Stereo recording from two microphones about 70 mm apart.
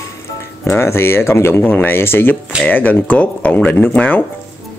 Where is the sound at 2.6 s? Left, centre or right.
Left.